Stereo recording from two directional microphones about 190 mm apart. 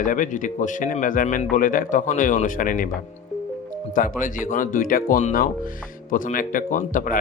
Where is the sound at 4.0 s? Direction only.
45° left (ahead or behind).